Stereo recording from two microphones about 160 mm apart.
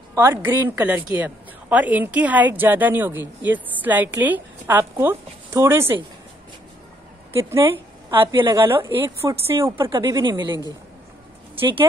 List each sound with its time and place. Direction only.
0.1 s a woman's voice: 15° right (ahead or behind)
7.3 s a woman's voice: 15° right (ahead or behind)
8.1 s a woman's voice: 30° right (ahead or behind)
8.9 s a woman's voice: 15° right (ahead or behind)
9.8 s speech: 30° right (ahead or behind)